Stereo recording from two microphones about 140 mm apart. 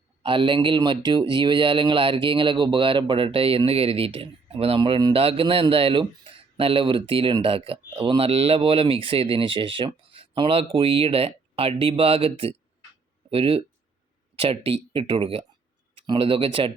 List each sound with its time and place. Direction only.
0.2 s speech: 40° right (ahead or behind)